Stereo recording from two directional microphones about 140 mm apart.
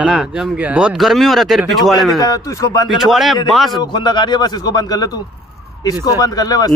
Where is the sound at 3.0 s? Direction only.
Centre (ahead or behind).